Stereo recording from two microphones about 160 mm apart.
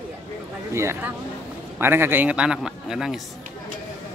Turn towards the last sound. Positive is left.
turn(degrees=-5)  # may be behind; listen again after turning